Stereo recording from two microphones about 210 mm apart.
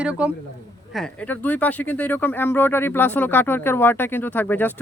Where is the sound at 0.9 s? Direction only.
5° left (ahead or behind).